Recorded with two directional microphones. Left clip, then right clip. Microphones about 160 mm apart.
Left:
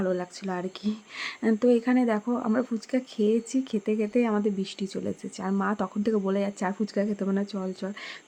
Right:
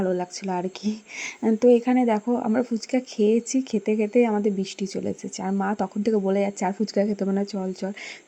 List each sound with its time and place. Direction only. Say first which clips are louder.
0.0 s speech: right 3 dB; 10° right (ahead or behind)